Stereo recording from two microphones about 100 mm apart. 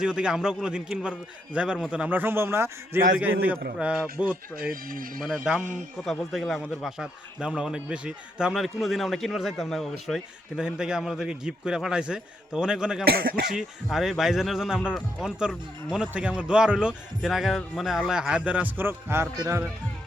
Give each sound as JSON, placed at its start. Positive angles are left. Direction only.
{"t": 0.0, "sound": "a man's voice", "side_deg": -10}
{"t": 3.2, "sound": "speech", "side_deg": -15}
{"t": 10.6, "sound": "speech", "side_deg": -10}